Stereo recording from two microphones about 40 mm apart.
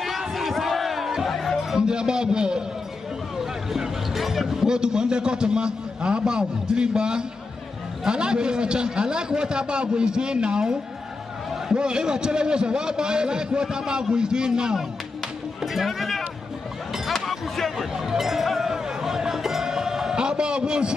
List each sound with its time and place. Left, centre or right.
0.3 s battle cry: centre
1.2 s music: centre
1.8 s a man's voice: right
3.3 s a man's voice: centre
15.6 s speech: centre
16.9 s a sound: centre
17.9 s music: centre
20.2 s a sound: right